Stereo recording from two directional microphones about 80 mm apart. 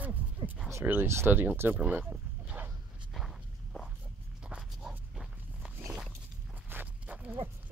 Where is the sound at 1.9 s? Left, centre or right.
Centre.